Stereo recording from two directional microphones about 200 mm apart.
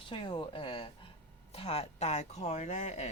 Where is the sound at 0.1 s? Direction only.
25° left (ahead or behind).